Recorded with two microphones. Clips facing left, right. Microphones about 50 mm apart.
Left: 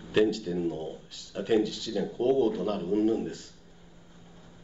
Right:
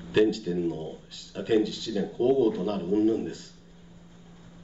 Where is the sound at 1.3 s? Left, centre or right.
Centre.